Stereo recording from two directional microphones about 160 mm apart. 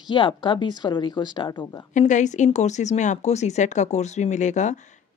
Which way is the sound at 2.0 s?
50° left (ahead or behind).